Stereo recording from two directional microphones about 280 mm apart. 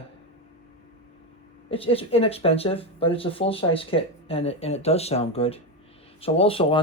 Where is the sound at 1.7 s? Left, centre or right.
Centre.